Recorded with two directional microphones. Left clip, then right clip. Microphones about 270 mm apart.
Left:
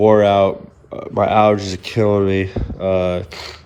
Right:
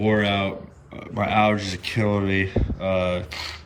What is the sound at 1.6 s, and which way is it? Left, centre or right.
Speech, left.